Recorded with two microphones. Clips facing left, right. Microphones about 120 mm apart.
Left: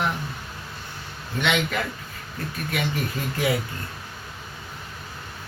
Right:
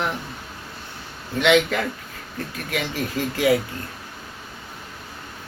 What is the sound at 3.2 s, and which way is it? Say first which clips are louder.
Speech: right 5 dB; 90° right.